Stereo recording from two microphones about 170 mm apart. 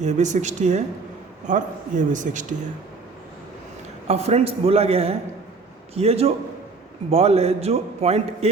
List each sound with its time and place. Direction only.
0.0 s a man's voice: 45° right (ahead or behind)
4.0 s a man's voice: 40° right (ahead or behind)